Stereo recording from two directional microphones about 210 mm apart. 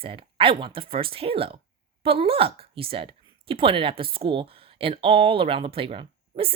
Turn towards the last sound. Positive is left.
turn(degrees=-25)  # may be behind; listen again after turning